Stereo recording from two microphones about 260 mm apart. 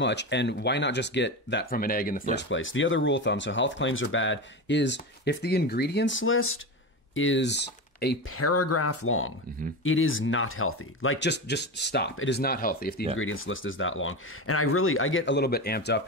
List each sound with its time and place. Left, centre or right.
0.0 s speech: left
2.3 s speech: left
8.4 s speech: left
13.2 s speech: left